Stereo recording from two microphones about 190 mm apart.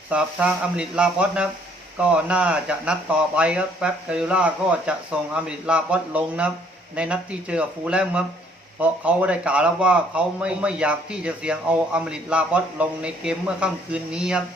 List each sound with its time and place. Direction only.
0.1 s a man's voice: 5° right (ahead or behind)